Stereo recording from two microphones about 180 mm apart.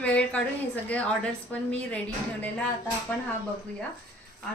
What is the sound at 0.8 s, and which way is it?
Speech, 5° left (ahead or behind).